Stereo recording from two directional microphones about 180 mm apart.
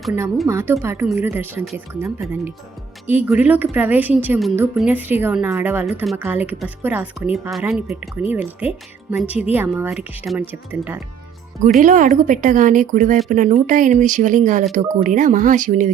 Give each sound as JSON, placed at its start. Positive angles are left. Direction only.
{"t": 0.4, "sound": "a woman's voice", "side_deg": -15}
{"t": 11.6, "sound": "speech", "side_deg": -45}